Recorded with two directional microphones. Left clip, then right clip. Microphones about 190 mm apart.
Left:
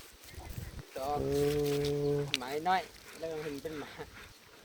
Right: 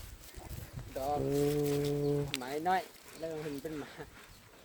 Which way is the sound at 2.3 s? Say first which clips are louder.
Left 1 dB; 45° right (ahead or behind).